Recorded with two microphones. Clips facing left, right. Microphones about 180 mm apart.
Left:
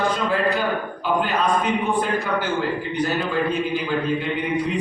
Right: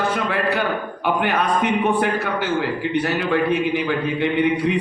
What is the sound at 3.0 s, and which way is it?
A man's voice, 70° right (ahead or behind).